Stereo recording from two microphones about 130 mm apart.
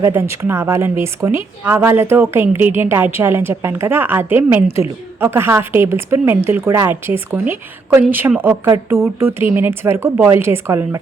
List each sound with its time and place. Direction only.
0.0 s a woman's voice: 20° right (ahead or behind)